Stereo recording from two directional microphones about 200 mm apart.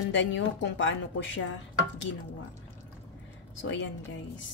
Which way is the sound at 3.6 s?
65° left (ahead or behind).